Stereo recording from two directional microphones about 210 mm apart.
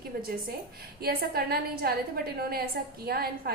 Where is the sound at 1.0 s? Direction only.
45° right (ahead or behind).